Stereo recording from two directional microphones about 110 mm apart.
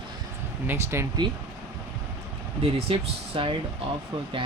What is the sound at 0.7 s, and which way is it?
Speech, 20° right (ahead or behind).